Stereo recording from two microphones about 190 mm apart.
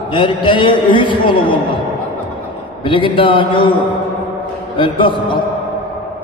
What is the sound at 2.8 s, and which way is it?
Speech, 25° left (ahead or behind).